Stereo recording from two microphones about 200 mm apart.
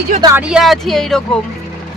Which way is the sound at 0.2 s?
15° right (ahead or behind).